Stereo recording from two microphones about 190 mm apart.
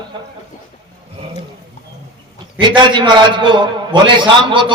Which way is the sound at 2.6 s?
25° right (ahead or behind).